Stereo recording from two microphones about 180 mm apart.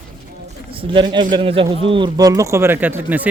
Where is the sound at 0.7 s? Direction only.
25° right (ahead or behind).